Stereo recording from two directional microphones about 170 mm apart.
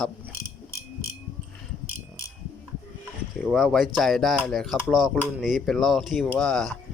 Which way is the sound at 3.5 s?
Centre (ahead or behind).